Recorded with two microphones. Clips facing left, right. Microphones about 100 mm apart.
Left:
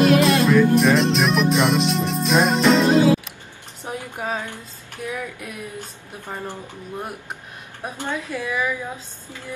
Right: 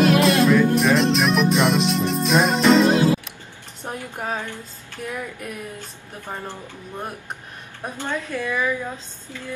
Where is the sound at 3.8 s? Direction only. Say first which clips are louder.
Left 1 dB; 10° left (ahead or behind).